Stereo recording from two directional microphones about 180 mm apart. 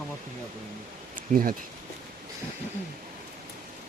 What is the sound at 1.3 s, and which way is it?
Speech, 50° right (ahead or behind).